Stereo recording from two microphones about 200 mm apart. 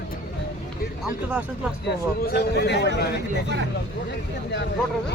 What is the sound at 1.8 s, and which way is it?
A man's voice, 55° left (ahead or behind).